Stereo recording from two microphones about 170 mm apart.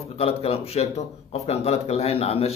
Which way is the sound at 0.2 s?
35° left (ahead or behind).